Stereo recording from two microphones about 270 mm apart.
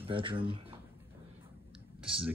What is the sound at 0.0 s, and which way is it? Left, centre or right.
Speech, centre.